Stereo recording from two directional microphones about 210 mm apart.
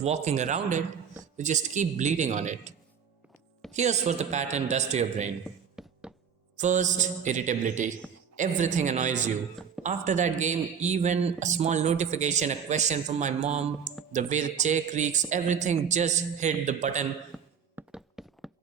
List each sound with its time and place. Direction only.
0.0 s speech: 30° right (ahead or behind)
5.7 s music: 5° right (ahead or behind)
6.6 s speech: 35° right (ahead or behind)
17.3 s a sound: 5° right (ahead or behind)